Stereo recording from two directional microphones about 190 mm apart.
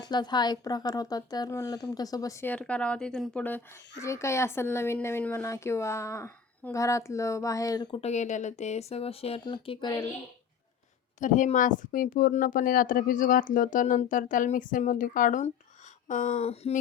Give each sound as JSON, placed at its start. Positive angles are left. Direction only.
{"t": 0.0, "sound": "speech", "side_deg": 20}
{"t": 11.2, "sound": "speech", "side_deg": 40}